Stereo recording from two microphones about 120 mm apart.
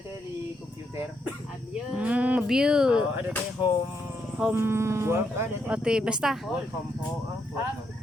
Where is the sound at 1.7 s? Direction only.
10° right (ahead or behind).